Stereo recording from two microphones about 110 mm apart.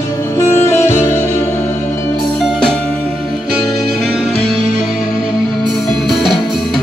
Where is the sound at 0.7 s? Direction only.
25° left (ahead or behind).